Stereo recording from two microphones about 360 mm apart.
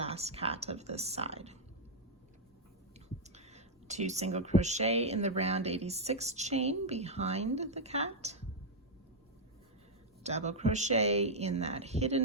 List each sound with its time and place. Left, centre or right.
0.0 s speech: centre
3.2 s speech: centre
10.2 s speech: centre